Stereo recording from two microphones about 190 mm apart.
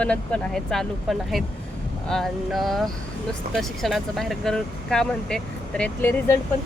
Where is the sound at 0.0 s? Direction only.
5° left (ahead or behind).